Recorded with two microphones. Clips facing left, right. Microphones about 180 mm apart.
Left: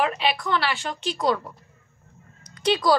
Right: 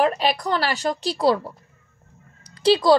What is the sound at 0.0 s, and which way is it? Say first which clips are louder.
A woman's voice: right 4 dB; 40° right (ahead or behind).